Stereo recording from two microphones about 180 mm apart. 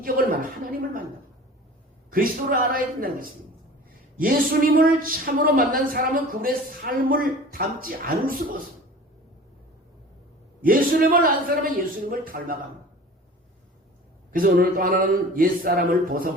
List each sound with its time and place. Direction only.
0.0 s a man's voice: 55° right (ahead or behind)
2.1 s a man's voice: 50° right (ahead or behind)
10.6 s a man's voice: 50° right (ahead or behind)
14.3 s a man's voice: 50° right (ahead or behind)